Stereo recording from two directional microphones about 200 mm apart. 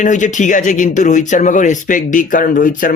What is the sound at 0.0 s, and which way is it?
Speech, 40° left (ahead or behind).